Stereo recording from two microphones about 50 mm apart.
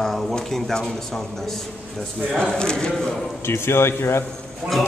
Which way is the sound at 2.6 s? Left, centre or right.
Centre.